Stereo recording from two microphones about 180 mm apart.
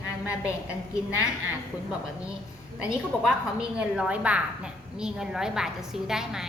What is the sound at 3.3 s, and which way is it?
A woman's voice, 5° right (ahead or behind).